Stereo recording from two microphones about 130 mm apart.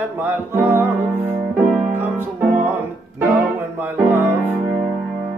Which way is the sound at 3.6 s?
15° right (ahead or behind).